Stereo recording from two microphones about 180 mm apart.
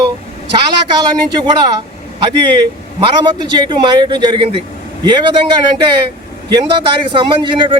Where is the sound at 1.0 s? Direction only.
20° right (ahead or behind).